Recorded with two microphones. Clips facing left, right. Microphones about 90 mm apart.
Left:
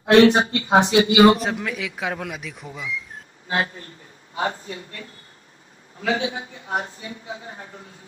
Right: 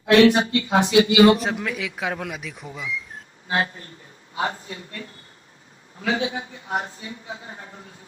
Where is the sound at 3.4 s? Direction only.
30° right (ahead or behind).